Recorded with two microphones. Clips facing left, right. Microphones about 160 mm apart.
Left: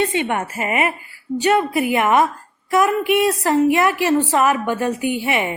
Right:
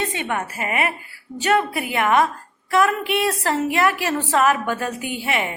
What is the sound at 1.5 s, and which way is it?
A woman's voice, 15° left (ahead or behind).